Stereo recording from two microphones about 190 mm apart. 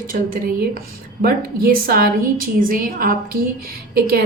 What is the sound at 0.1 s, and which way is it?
A woman's voice, 45° right (ahead or behind).